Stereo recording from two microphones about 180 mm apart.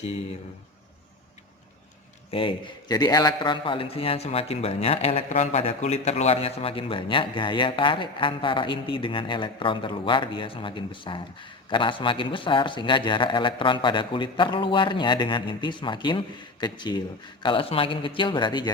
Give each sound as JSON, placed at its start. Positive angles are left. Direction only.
{"t": 2.3, "sound": "a man's voice", "side_deg": 30}